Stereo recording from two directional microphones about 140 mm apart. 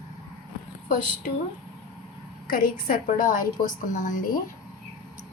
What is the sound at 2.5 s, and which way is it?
Speech, 80° left.